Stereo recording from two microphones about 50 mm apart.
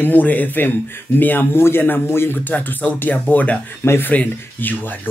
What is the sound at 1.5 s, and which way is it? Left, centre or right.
Speech, left.